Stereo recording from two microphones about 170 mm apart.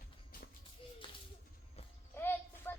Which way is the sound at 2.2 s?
15° left (ahead or behind).